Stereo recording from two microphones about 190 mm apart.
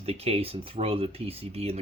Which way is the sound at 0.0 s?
35° right (ahead or behind).